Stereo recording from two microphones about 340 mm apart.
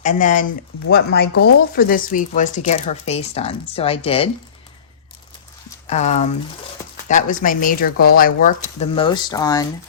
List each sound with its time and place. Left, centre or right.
0.0 s speech: left
5.9 s speech: centre
8.8 s speech: centre